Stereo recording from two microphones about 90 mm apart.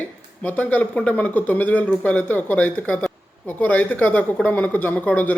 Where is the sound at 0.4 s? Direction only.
15° left (ahead or behind).